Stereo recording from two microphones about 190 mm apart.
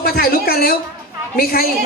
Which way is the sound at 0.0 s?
50° left (ahead or behind).